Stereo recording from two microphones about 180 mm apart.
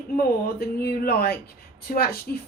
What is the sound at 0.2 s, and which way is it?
A woman's voice, 55° left (ahead or behind).